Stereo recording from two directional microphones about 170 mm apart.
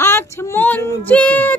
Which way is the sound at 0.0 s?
15° left (ahead or behind).